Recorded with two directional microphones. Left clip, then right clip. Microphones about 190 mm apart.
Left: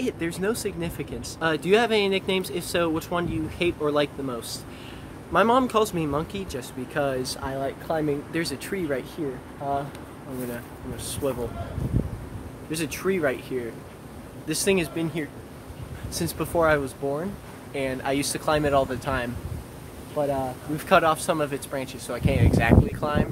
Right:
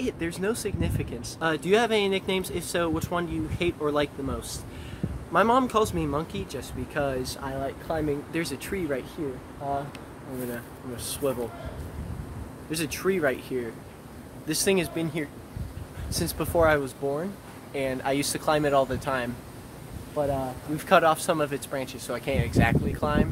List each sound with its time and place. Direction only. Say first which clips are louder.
0.0 s speech: left 2 dB; centre (ahead or behind)
11.2 s speech: even; 20° right (ahead or behind)
12.7 s speech: left 1 dB; 20° right (ahead or behind)